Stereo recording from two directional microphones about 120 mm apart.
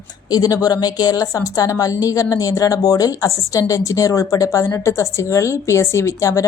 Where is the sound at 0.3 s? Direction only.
30° left (ahead or behind).